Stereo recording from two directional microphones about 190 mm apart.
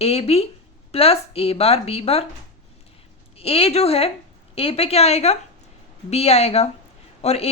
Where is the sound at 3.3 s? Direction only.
30° left (ahead or behind).